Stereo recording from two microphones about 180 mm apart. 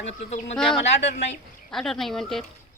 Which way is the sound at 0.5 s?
5° left (ahead or behind).